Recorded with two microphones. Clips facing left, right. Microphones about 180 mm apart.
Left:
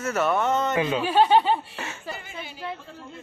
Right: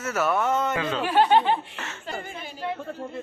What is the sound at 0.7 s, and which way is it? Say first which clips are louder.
Speech: left 3 dB; 20° left (ahead or behind).